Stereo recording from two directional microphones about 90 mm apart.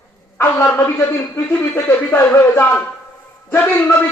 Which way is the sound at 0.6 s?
30° left (ahead or behind).